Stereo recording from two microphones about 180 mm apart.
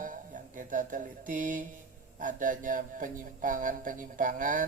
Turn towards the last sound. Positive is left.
turn(degrees=-45)  # may be behind; listen again after turning